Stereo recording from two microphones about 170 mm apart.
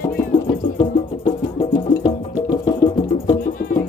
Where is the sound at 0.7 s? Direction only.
25° left (ahead or behind).